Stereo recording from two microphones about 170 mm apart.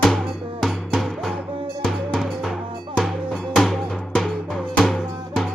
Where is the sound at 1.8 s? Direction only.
Centre (ahead or behind).